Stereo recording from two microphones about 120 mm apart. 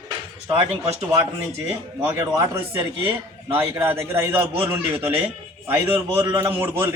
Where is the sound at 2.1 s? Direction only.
25° right (ahead or behind).